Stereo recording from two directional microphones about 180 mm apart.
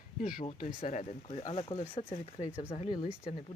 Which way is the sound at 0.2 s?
50° left (ahead or behind).